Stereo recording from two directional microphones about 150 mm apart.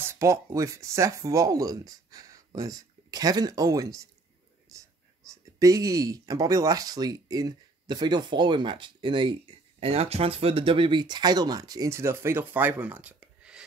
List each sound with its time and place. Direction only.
0.0 s speech: 20° right (ahead or behind)
5.3 s speech: 20° right (ahead or behind); by 13.7 s 5° right (ahead or behind)